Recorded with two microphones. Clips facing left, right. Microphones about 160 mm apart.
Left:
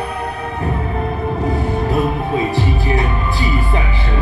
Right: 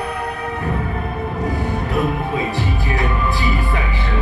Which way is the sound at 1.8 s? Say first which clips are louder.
Left 1 dB; 30° left (ahead or behind).